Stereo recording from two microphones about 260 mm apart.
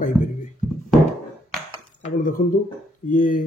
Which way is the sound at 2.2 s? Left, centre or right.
Left.